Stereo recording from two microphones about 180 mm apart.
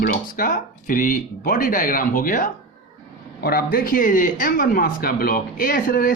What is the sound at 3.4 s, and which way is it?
Speech, 55° left (ahead or behind).